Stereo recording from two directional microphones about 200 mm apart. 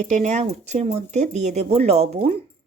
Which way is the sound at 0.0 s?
35° right (ahead or behind).